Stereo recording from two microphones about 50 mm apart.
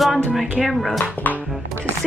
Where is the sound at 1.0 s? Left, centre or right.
Left.